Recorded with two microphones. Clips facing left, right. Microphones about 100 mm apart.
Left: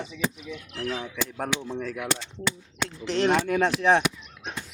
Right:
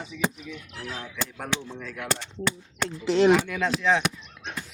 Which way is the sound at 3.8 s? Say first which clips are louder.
Left 2 dB; 55° left (ahead or behind).